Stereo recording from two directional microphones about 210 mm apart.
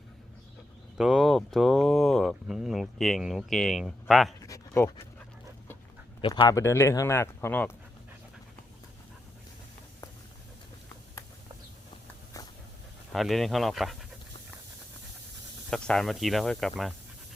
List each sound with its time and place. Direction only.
0.9 s speech: centre (ahead or behind)
4.4 s a sound: 15° left (ahead or behind)
6.2 s speech: 20° left (ahead or behind)
13.1 s speech: centre (ahead or behind)
15.7 s speech: 5° left (ahead or behind)